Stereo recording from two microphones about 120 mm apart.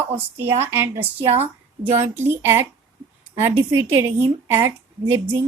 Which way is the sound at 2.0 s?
20° right (ahead or behind).